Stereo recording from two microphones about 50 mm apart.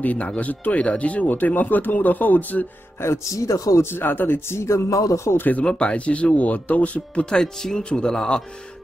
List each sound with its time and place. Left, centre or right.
0.0 s speech: left
3.0 s speech: left
3.8 s speech: left
4.5 s a man's voice: left
5.4 s speech: left
5.7 s speech: left
7.2 s speech: centre